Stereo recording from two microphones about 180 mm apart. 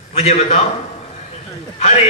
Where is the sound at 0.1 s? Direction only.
35° left (ahead or behind).